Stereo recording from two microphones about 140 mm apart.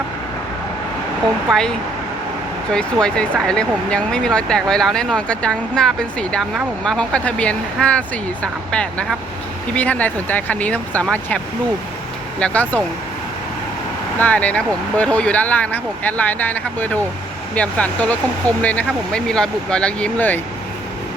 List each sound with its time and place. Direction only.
1.5 s speech: 5° left (ahead or behind)
2.7 s speech: 5° left (ahead or behind)
12.4 s speech: 10° left (ahead or behind)
14.2 s speech: 10° left (ahead or behind)